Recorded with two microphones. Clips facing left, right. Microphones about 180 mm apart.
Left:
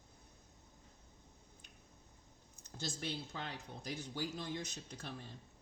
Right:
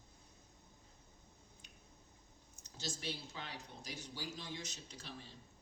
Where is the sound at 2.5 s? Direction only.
55° left (ahead or behind).